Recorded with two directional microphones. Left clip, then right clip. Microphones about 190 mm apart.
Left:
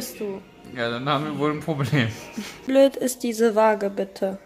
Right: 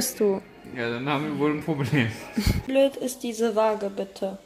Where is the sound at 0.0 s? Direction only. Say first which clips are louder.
Right 7 dB; 35° right (ahead or behind).